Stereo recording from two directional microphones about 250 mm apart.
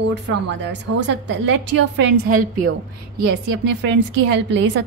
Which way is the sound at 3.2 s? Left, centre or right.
Right.